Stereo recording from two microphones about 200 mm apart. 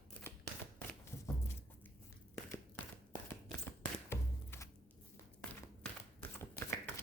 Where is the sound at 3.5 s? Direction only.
10° left (ahead or behind).